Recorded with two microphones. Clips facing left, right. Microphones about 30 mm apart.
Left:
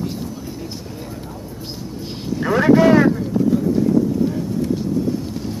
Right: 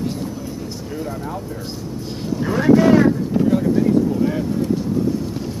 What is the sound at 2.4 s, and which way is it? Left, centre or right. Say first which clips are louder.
Vehicle: left 1 dB; centre.